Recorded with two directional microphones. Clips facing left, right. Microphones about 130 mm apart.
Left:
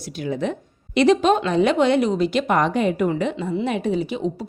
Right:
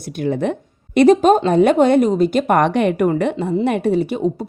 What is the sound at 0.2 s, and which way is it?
A woman's voice, 55° right (ahead or behind).